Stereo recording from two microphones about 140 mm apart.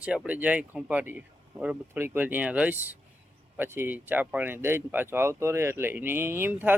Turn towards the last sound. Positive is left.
turn(degrees=-15)  # may be behind; listen again after turning